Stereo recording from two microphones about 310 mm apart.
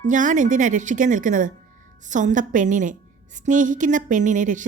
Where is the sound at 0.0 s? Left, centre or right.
Right.